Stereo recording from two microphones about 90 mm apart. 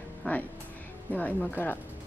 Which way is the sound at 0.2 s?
15° left (ahead or behind).